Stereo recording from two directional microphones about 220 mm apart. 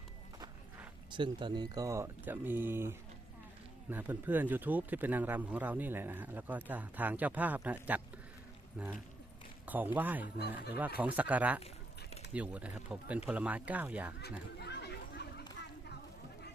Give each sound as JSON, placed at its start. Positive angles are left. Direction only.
{"t": 0.3, "sound": "speech", "side_deg": -15}
{"t": 14.2, "sound": "chatter", "side_deg": 50}